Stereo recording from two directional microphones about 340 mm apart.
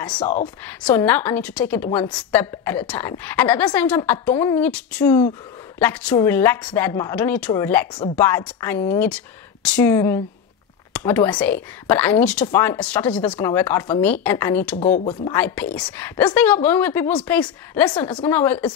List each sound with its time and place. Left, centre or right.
0.0 s a woman's voice: centre
15.0 s a woman's voice: centre
15.3 s a woman's voice: centre